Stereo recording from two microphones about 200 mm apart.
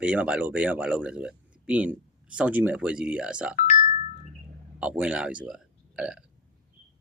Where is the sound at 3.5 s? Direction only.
40° left (ahead or behind).